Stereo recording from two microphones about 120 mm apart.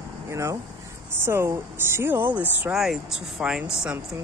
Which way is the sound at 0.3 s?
25° right (ahead or behind).